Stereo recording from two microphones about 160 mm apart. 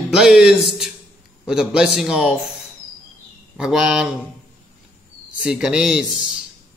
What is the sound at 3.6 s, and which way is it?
Speech, 5° right (ahead or behind).